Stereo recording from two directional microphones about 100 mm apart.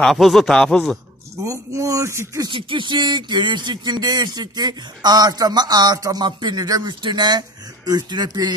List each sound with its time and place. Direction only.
0.0 s speech: centre (ahead or behind)
1.3 s speech: 30° right (ahead or behind)
2.4 s speech: 55° right (ahead or behind)